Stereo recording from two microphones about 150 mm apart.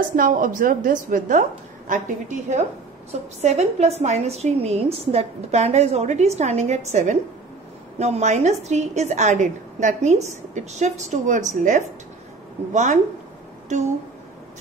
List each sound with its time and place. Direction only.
0.1 s a woman's voice: 65° right (ahead or behind)